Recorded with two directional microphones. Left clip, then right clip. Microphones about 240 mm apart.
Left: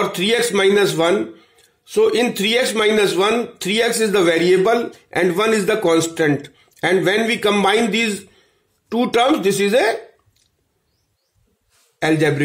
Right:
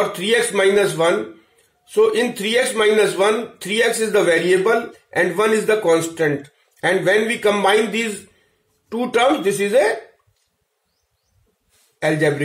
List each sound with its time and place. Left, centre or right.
0.1 s speech: left
12.0 s speech: left